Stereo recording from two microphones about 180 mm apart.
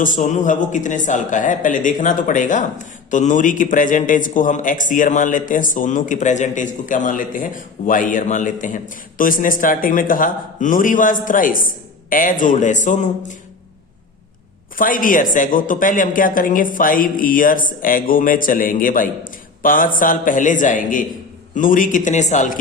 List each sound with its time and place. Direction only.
0.0 s speech: 45° left (ahead or behind)
14.8 s speech: 50° left (ahead or behind)